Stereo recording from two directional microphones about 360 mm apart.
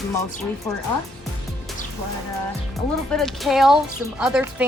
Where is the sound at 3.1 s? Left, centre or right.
Centre.